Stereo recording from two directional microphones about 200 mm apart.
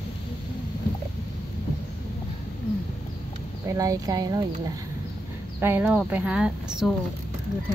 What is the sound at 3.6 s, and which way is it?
Speech, 15° right (ahead or behind).